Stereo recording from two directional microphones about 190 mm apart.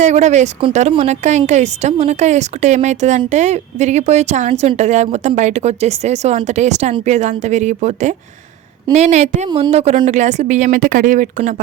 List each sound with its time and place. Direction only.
0.0 s a woman's voice: 40° right (ahead or behind)